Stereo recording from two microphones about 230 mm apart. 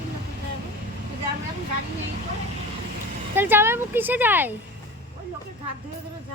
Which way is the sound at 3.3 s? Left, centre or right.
Centre.